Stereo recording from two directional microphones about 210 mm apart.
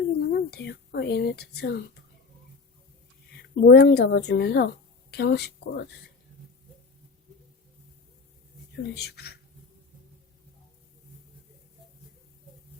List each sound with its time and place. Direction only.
0.2 s speech: 50° left (ahead or behind)
3.5 s a woman's voice: 55° left (ahead or behind)
8.7 s speech: 50° left (ahead or behind)